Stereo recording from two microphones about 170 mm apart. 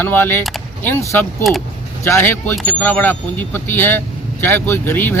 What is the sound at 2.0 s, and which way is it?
Speech, 15° left (ahead or behind).